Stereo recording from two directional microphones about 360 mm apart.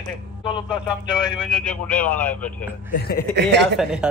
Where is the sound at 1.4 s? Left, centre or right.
Centre.